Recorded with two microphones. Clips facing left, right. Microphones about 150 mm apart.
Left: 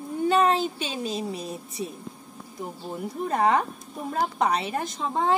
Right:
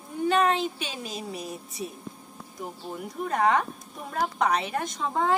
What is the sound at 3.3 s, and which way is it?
Speech, 30° left (ahead or behind).